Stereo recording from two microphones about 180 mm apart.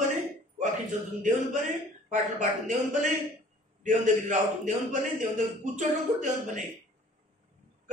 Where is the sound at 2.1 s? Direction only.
45° right (ahead or behind).